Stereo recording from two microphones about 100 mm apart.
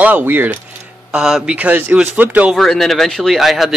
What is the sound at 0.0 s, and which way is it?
Speech, 20° right (ahead or behind).